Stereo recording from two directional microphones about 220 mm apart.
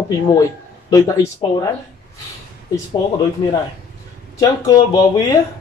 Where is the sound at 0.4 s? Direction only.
15° left (ahead or behind).